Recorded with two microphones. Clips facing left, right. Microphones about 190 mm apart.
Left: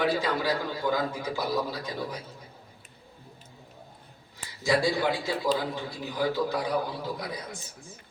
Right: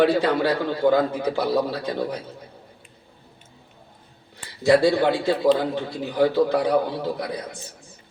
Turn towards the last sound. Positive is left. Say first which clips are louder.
# right 6 dB
turn(degrees=-65)  # may be behind; listen again after turning